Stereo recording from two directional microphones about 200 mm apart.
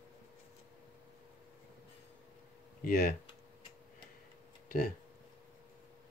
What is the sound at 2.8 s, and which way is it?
Speech, 50° left (ahead or behind).